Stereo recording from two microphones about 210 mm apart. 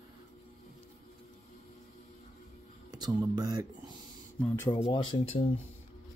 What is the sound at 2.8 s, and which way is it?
Speech, 20° right (ahead or behind).